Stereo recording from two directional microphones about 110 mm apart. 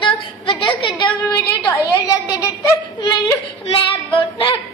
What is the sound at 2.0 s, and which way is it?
Speech, 30° left (ahead or behind).